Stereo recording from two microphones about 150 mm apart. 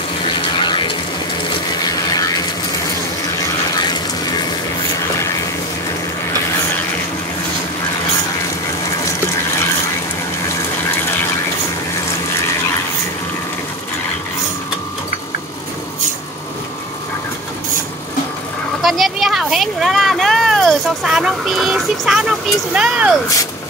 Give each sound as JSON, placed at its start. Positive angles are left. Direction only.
{"t": 0.3, "sound": "a sound", "side_deg": 30}
{"t": 18.8, "sound": "vehicle", "side_deg": 0}
{"t": 22.8, "sound": "speech", "side_deg": -5}